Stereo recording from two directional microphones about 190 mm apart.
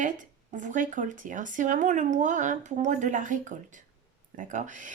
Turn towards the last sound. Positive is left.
turn(degrees=-40)  # may be behind; listen again after turning